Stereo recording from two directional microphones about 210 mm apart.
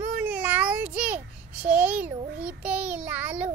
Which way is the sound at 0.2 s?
5° right (ahead or behind).